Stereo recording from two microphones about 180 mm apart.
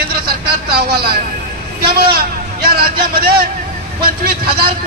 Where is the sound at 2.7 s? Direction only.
60° right (ahead or behind).